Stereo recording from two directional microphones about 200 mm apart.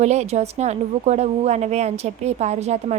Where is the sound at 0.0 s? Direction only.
35° right (ahead or behind).